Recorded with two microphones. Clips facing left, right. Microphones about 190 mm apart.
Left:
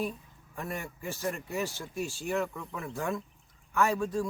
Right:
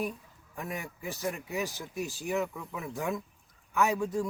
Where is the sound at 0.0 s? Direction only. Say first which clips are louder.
Even; 15° right (ahead or behind).